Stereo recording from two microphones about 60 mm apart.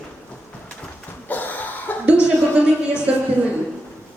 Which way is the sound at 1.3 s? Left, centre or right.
Left.